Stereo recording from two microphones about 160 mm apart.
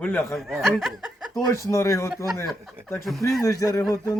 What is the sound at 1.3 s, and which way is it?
Speech, 20° left (ahead or behind).